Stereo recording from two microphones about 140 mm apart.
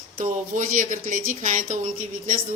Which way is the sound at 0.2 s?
65° right (ahead or behind).